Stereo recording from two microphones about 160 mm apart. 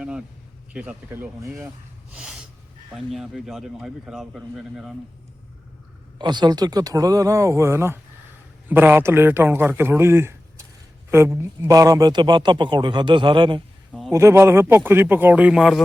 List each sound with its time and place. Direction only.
0.0 s a sound: 5° right (ahead or behind)
0.7 s a man's voice: 10° right (ahead or behind)
2.1 s gasp: 5° right (ahead or behind)
2.9 s speech: centre (ahead or behind)
6.1 s a man's voice: 25° right (ahead or behind)
14.1 s a man's voice: 15° right (ahead or behind)